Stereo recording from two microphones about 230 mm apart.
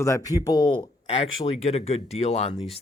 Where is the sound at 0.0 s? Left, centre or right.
Centre.